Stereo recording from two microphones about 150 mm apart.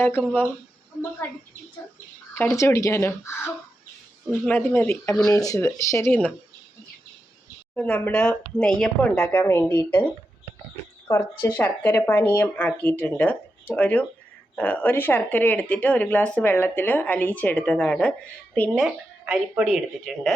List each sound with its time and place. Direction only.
0.0 s speech: 15° left (ahead or behind)
2.3 s speech: 15° left (ahead or behind)
7.8 s speech: 10° left (ahead or behind)
11.4 s speech: 10° left (ahead or behind)
18.8 s speech: 5° right (ahead or behind)